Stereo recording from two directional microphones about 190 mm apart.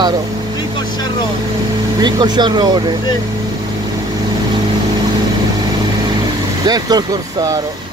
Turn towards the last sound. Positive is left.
turn(degrees=-20)  # may be behind; listen again after turning